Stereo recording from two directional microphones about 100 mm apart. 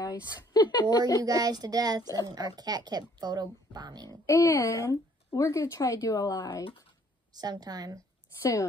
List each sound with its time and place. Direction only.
0.0 s a woman's voice: 40° left (ahead or behind)
1.2 s speech: 40° right (ahead or behind)
4.3 s speech: 30° left (ahead or behind)
7.3 s speech: 40° right (ahead or behind)
8.4 s speech: 30° left (ahead or behind)